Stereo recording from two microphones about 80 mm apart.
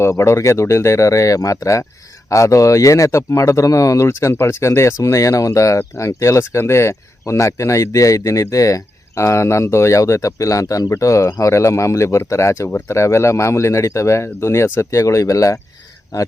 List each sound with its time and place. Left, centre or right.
0.0 s a man's voice: left